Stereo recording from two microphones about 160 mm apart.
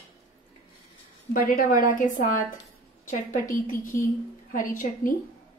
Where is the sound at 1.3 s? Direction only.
60° left (ahead or behind).